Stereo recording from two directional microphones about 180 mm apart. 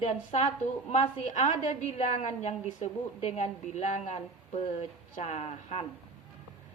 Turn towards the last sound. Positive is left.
turn(degrees=35)  # may be behind; listen again after turning